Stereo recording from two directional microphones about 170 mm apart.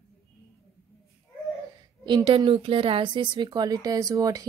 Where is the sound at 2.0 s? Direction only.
30° right (ahead or behind).